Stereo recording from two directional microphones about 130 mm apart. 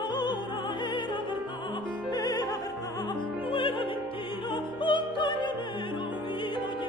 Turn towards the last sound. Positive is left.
turn(degrees=40)  # may be behind; listen again after turning